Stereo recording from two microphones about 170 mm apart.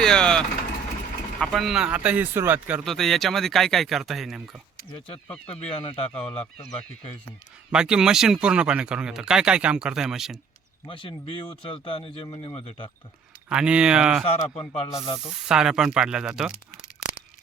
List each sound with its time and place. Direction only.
0.0 s vehicle: 5° left (ahead or behind)
1.4 s speech: centre (ahead or behind)
2.8 s speech: centre (ahead or behind)
4.9 s speech: 30° left (ahead or behind)
6.1 s speech: 5° left (ahead or behind)
6.6 s speech: 40° left (ahead or behind)
7.7 s speech: 5° right (ahead or behind)
10.8 s speech: 30° left (ahead or behind)
13.5 s speech: 5° right (ahead or behind)
14.3 s speech: 35° left (ahead or behind)
15.4 s speech: 5° right (ahead or behind)
16.7 s tearing: 55° left (ahead or behind)